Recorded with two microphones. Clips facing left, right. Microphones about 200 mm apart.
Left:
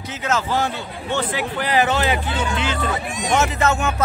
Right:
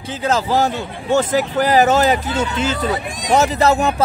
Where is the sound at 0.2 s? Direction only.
35° right (ahead or behind).